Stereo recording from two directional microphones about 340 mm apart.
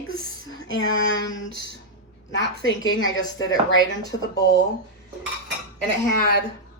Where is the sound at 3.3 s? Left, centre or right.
Left.